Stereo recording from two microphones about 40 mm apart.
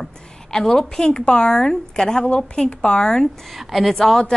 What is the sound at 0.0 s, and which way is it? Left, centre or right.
Speech, centre.